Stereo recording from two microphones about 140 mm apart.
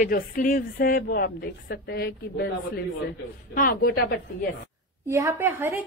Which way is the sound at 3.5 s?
85° left.